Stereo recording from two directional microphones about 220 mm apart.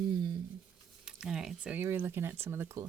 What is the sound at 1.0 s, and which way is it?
Speech, centre (ahead or behind).